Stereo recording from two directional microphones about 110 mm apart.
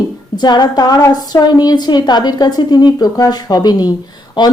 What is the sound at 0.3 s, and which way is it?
A woman's voice, 40° left (ahead or behind).